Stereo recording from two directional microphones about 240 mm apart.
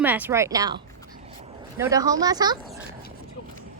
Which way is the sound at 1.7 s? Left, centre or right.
Centre.